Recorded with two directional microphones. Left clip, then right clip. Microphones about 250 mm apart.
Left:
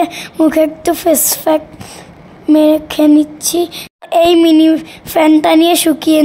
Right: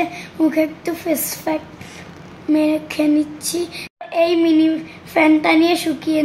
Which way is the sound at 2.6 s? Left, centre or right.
Left.